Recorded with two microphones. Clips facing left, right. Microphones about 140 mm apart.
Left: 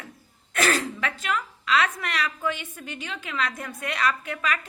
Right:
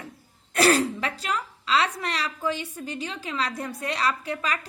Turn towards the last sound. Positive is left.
turn(degrees=-35)  # may be behind; listen again after turning